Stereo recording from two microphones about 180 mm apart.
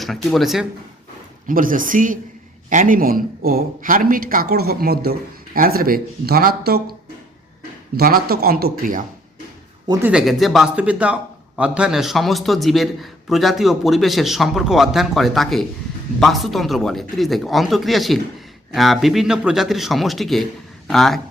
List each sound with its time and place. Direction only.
0.0 s a man's voice: centre (ahead or behind)
1.5 s speech: 50° right (ahead or behind)
7.9 s speech: 55° right (ahead or behind)
10.1 s a man's voice: centre (ahead or behind)